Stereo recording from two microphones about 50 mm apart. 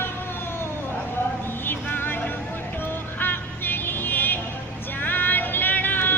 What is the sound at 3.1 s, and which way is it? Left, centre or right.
Vehicle, left.